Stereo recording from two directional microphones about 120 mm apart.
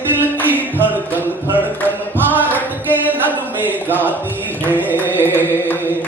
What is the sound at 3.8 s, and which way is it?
Speech, 15° left (ahead or behind).